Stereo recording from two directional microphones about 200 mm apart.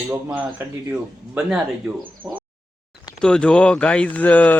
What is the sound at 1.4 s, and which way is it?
Speech, 5° right (ahead or behind).